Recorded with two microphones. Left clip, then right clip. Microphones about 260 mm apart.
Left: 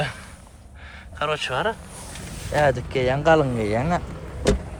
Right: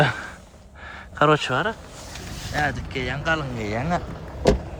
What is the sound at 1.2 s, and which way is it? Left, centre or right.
Speech, right.